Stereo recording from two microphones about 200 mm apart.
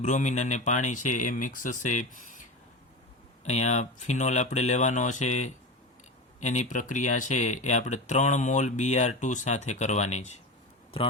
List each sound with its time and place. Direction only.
0.0 s speech: 35° left (ahead or behind)